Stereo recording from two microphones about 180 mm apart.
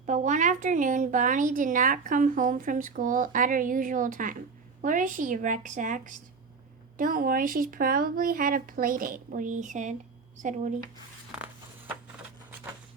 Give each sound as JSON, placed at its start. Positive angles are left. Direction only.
{"t": 0.0, "sound": "a woman's voice", "side_deg": -45}